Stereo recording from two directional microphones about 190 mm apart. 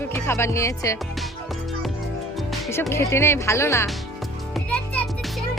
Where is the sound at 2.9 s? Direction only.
15° left (ahead or behind).